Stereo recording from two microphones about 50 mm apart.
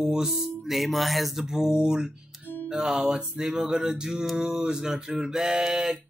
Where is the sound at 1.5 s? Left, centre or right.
Centre.